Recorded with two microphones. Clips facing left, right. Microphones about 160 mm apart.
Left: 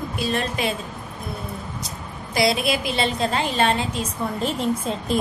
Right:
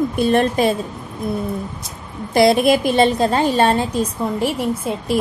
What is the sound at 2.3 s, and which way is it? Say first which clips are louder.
A woman's voice: right 8 dB; 50° right (ahead or behind).